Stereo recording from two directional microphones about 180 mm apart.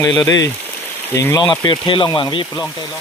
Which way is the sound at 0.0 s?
20° left (ahead or behind).